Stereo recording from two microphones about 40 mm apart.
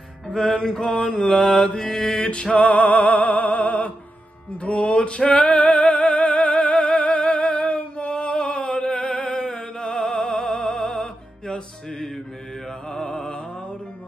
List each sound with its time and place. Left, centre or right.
0.3 s mantra: centre; by 2.4 s left
2.5 s music: left; by 13.4 s centre